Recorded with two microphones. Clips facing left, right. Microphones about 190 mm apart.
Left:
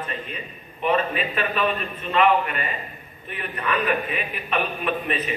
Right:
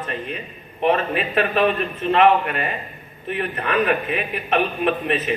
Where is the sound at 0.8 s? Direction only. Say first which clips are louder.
Right 3 dB; 45° right (ahead or behind).